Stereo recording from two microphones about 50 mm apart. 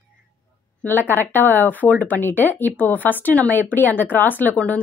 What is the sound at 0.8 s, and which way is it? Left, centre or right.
Speech, left.